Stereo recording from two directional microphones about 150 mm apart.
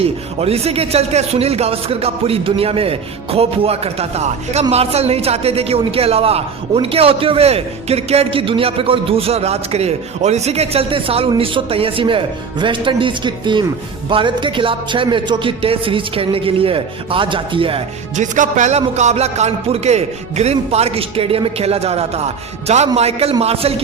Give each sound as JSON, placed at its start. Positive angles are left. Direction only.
{"t": 0.0, "sound": "a woman's voice", "side_deg": -40}
{"t": 18.2, "sound": "a man's voice", "side_deg": -55}